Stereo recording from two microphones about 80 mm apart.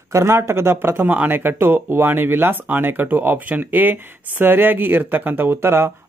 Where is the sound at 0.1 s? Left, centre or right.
Right.